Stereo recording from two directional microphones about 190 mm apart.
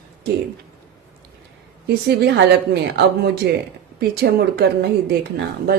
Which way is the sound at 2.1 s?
60° right (ahead or behind).